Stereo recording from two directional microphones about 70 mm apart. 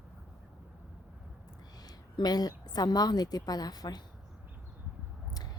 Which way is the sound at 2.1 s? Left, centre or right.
Left.